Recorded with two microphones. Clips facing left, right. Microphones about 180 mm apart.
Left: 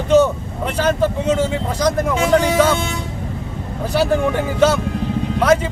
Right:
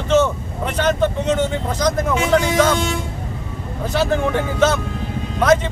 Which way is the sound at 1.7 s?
35° left (ahead or behind).